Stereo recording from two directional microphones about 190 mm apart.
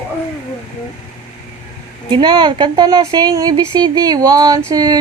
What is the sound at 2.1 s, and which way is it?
Speech, 25° right (ahead or behind).